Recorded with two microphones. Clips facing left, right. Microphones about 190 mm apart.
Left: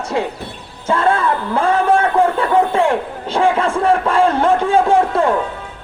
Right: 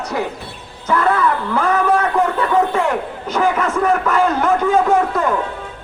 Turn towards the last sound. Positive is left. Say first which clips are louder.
# left 2 dB
turn(degrees=30)  # may be behind; listen again after turning